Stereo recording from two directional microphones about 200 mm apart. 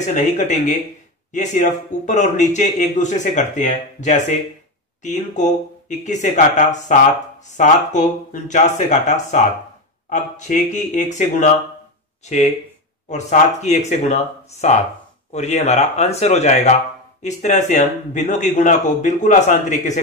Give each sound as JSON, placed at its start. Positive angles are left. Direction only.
{"t": 0.0, "sound": "speech", "side_deg": 35}